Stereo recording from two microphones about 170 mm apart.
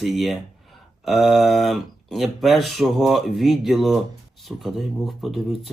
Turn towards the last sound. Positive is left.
turn(degrees=0)  # may be behind; listen again after turning